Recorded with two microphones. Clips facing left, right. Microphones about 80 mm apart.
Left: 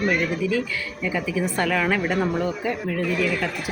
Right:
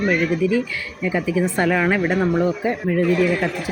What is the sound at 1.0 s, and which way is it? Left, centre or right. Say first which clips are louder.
Speech: right 5 dB; right.